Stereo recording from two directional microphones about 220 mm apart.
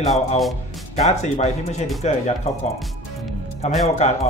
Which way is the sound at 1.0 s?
30° left (ahead or behind).